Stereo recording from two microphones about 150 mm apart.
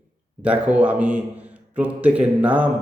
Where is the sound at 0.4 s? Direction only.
10° right (ahead or behind).